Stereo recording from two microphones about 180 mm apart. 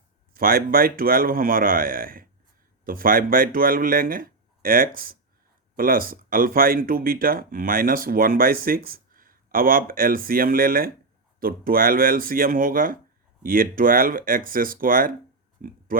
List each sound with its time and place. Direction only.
0.3 s speech: 55° right (ahead or behind)